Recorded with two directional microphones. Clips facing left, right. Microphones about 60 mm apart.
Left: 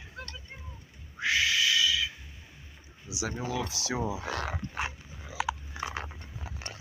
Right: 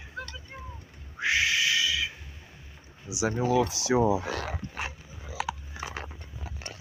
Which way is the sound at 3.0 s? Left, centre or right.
Right.